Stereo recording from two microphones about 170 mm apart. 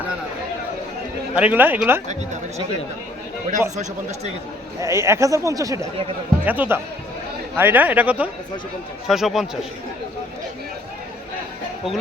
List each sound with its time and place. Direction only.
1.4 s speech: 10° right (ahead or behind)
4.8 s speech: 15° right (ahead or behind)